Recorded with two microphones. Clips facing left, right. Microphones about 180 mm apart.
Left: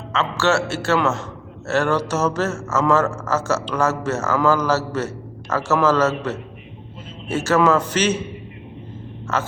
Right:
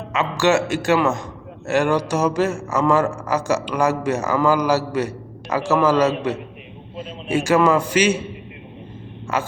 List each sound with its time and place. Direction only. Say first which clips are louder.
0.1 s speech: right 2 dB; 15° right (ahead or behind)
9.3 s speech: even; 10° right (ahead or behind)